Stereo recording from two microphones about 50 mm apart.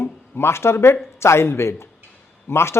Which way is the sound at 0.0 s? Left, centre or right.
Left.